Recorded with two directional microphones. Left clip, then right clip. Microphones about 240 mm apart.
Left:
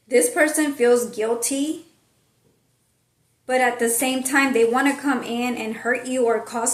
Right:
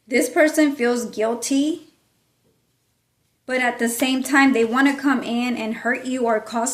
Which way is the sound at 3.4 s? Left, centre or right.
Right.